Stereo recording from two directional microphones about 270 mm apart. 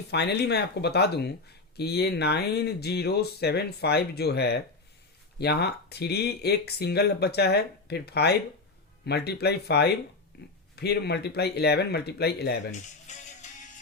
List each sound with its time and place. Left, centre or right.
0.1 s speech: left